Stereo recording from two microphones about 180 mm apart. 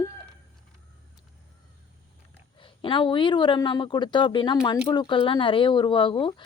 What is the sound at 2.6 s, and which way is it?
Speech, 30° left (ahead or behind).